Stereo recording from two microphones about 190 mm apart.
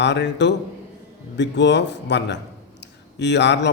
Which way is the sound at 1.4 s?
65° left (ahead or behind).